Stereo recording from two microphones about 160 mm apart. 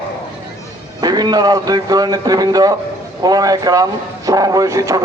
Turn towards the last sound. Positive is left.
turn(degrees=-20)  # may be behind; listen again after turning